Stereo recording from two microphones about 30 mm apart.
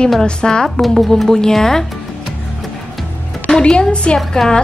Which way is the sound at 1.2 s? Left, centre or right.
Centre.